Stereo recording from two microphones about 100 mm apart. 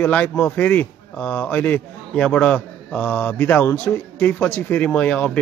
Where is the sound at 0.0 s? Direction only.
15° left (ahead or behind).